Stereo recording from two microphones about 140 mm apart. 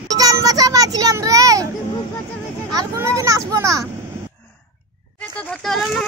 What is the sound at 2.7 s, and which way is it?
Speech, 25° right (ahead or behind).